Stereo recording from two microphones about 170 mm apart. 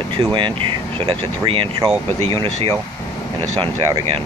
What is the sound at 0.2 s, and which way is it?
Speech, 30° right (ahead or behind).